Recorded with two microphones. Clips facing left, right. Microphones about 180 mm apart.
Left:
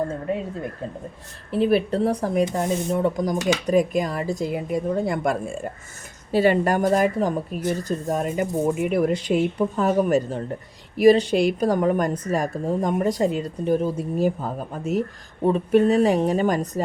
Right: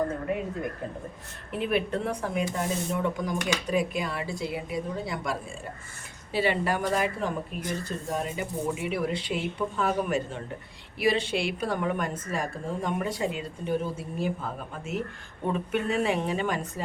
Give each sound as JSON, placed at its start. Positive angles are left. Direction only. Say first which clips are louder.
{"t": 1.5, "sound": "a woman's voice", "louder": "left 8 dB", "side_deg": 35}